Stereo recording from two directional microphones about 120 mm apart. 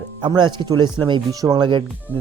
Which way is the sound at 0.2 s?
40° right (ahead or behind).